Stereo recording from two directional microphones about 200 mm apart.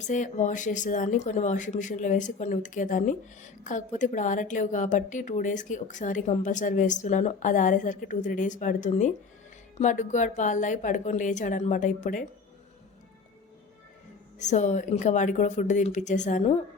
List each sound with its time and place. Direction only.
0.0 s speech: 40° left (ahead or behind)
14.3 s speech: 35° left (ahead or behind)